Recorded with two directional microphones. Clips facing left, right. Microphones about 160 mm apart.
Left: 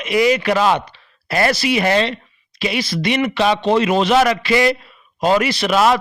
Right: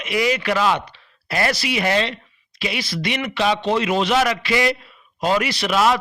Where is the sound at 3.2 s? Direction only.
60° left (ahead or behind).